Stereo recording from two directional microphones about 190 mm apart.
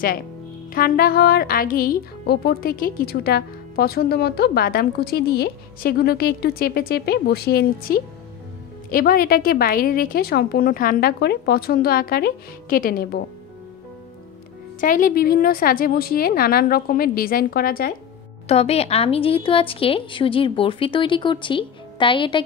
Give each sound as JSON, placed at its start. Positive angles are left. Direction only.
{"t": 0.7, "sound": "speech", "side_deg": 50}
{"t": 14.8, "sound": "speech", "side_deg": 45}
{"t": 18.5, "sound": "a woman's voice", "side_deg": 35}